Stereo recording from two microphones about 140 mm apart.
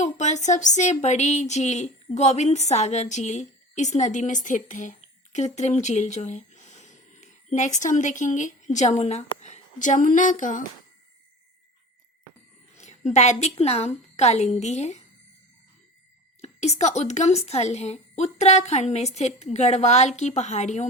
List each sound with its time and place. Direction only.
0.0 s speech: 55° left (ahead or behind)
12.7 s a woman's voice: 55° left (ahead or behind)
16.4 s a woman's voice: 50° left (ahead or behind)